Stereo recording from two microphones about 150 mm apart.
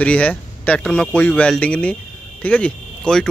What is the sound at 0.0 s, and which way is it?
Speech, 10° left (ahead or behind).